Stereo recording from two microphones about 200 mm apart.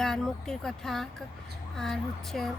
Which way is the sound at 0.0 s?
Centre (ahead or behind).